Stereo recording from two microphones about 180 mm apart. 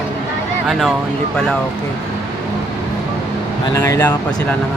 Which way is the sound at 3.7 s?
15° left (ahead or behind).